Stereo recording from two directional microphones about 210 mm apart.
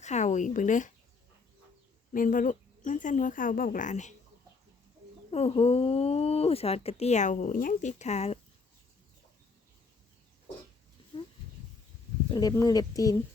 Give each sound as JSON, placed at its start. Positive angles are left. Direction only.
{"t": 0.0, "sound": "speech", "side_deg": 35}
{"t": 2.1, "sound": "speech", "side_deg": 40}
{"t": 5.3, "sound": "speech", "side_deg": 30}
{"t": 11.1, "sound": "a sound", "side_deg": 25}
{"t": 12.3, "sound": "speech", "side_deg": 20}